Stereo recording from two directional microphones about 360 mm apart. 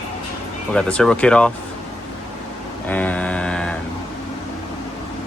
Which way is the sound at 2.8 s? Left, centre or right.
Centre.